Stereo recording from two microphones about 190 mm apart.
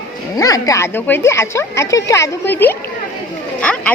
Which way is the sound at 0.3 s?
20° left (ahead or behind).